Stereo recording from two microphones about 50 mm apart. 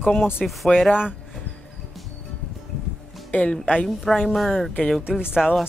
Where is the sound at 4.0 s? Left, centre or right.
Centre.